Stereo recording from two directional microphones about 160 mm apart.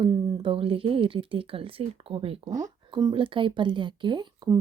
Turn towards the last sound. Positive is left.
turn(degrees=-30)  # may be behind; listen again after turning